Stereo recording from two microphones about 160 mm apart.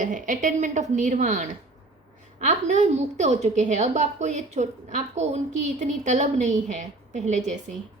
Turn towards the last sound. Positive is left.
turn(degrees=-50)  # may be behind; listen again after turning